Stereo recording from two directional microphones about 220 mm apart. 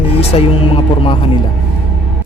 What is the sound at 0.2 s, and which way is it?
Speech, 25° left (ahead or behind).